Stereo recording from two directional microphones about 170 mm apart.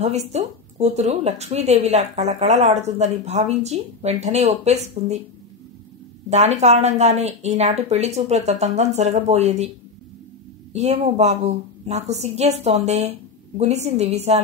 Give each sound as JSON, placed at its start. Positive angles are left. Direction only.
{"t": 0.0, "sound": "speech", "side_deg": -40}
{"t": 6.3, "sound": "speech", "side_deg": -40}
{"t": 10.7, "sound": "speech", "side_deg": -40}